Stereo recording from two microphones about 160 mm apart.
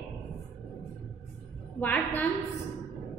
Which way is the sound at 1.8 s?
10° left (ahead or behind).